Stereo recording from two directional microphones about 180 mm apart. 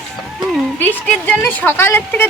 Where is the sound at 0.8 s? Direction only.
10° left (ahead or behind).